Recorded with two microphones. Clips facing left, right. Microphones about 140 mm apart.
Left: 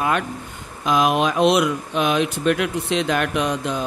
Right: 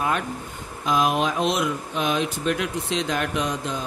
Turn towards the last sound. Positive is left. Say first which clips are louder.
# left 4 dB
turn(degrees=65)  # may be behind; listen again after turning